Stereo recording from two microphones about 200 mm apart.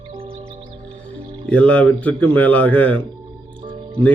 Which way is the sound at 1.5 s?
5° left (ahead or behind).